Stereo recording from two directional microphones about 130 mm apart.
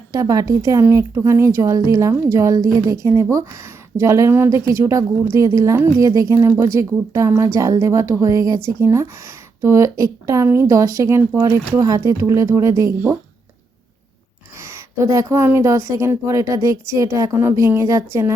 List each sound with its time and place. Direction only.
0.1 s a woman's voice: 25° right (ahead or behind)
14.6 s a woman's voice: 20° right (ahead or behind)